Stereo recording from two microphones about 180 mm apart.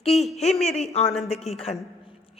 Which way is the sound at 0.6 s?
35° left (ahead or behind).